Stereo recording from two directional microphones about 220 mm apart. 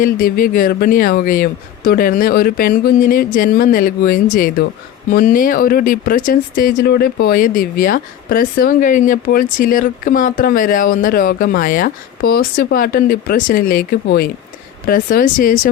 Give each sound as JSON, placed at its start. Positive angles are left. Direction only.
{"t": 0.0, "sound": "speech", "side_deg": 40}